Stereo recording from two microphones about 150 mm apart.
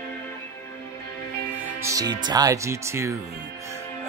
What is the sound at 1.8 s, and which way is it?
Music, 20° right (ahead or behind).